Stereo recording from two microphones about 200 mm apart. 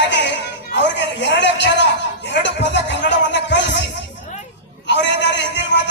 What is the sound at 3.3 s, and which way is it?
Music, 60° left (ahead or behind).